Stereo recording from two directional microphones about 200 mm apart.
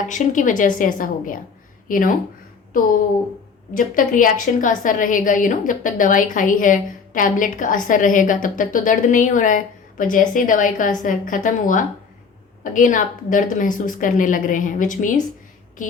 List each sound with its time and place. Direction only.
0.1 s a woman's voice: 40° left (ahead or behind)
3.8 s a woman's voice: 40° left (ahead or behind)